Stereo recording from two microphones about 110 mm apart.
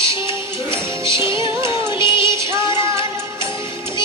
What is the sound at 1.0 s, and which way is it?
Music, 25° right (ahead or behind).